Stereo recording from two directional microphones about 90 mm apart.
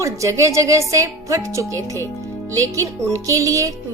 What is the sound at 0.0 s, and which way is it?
Speech, 35° right (ahead or behind).